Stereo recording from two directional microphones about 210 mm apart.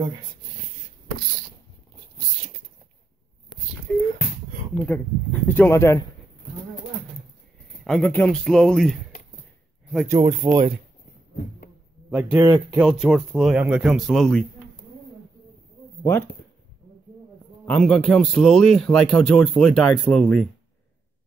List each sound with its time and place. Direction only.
4.8 s speech: 10° left (ahead or behind)
7.8 s a man's voice: 5° left (ahead or behind)
10.0 s speech: 20° right (ahead or behind)
12.1 s a man's voice: 5° right (ahead or behind)
16.0 s speech: 10° left (ahead or behind)
17.6 s a man's voice: 5° left (ahead or behind)